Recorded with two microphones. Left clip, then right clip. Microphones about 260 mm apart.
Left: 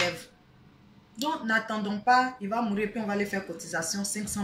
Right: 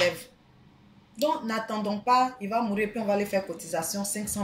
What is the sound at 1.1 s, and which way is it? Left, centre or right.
Speech, centre.